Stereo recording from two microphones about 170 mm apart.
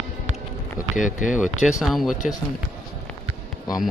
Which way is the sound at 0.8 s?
20° left (ahead or behind).